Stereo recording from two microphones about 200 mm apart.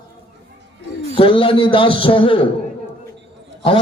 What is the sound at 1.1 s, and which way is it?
A man's voice, 25° left (ahead or behind).